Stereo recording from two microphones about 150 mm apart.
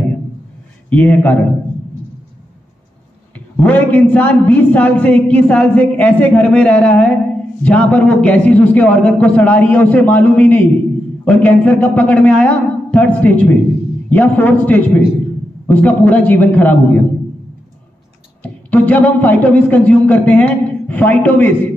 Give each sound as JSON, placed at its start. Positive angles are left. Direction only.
{"t": 0.8, "sound": "a man's voice", "side_deg": 10}
{"t": 3.3, "sound": "a man's voice", "side_deg": 10}
{"t": 18.4, "sound": "a man's voice", "side_deg": 10}